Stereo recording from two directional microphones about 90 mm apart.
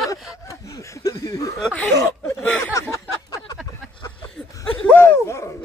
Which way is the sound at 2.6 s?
35° left (ahead or behind).